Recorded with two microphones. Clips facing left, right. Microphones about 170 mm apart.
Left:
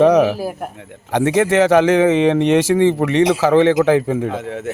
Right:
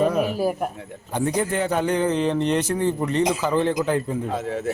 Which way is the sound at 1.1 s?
90° left.